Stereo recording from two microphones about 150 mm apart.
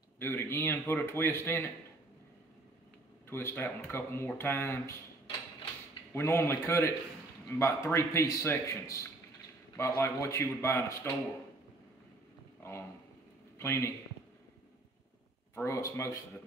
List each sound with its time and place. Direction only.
0.2 s speech: 15° left (ahead or behind)
3.3 s speech: 15° left (ahead or behind)
6.1 s a man's voice: 15° left (ahead or behind)
13.6 s speech: 15° left (ahead or behind)
15.5 s a man's voice: 20° left (ahead or behind)